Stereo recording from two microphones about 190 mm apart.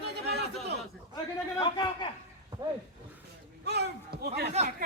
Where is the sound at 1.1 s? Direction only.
20° left (ahead or behind).